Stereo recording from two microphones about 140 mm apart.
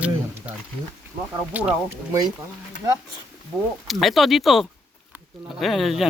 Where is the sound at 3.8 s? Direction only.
Centre (ahead or behind).